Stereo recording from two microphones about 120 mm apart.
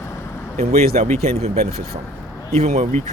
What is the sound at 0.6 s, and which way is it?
Speech, 65° right (ahead or behind).